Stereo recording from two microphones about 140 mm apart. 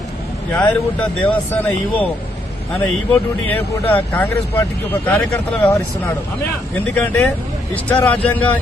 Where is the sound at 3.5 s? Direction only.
10° left (ahead or behind).